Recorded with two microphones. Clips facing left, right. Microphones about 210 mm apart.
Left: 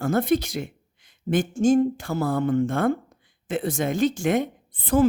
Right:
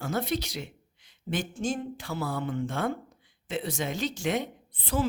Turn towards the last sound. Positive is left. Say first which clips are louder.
# left 9 dB
turn(degrees=50)  # may be behind; listen again after turning